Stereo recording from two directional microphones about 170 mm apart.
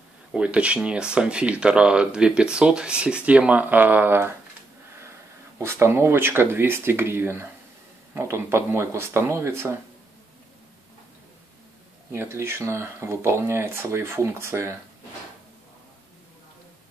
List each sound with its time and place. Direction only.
0.3 s speech: 5° right (ahead or behind)
5.6 s speech: 15° right (ahead or behind)
12.1 s speech: 15° right (ahead or behind)